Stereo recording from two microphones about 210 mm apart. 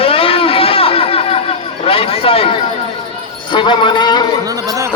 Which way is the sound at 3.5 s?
20° left (ahead or behind).